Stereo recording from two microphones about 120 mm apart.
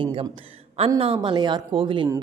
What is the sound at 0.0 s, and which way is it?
A woman's voice, 45° right (ahead or behind).